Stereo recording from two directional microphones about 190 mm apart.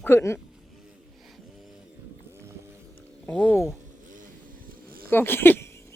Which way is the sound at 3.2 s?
5° left (ahead or behind).